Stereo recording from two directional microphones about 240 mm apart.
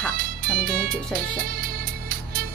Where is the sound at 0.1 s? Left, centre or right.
Right.